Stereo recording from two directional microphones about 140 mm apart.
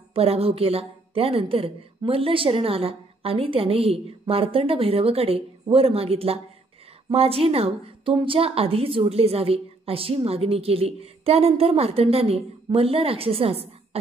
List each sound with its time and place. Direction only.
0.1 s a woman's voice: 45° right (ahead or behind)